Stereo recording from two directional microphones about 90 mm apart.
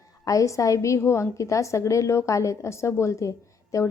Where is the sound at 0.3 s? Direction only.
35° left (ahead or behind).